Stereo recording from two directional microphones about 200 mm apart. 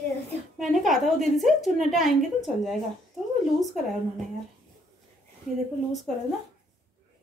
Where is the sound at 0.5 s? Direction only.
Centre (ahead or behind).